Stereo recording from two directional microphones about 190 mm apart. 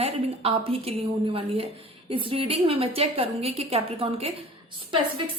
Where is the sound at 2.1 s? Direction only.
30° right (ahead or behind).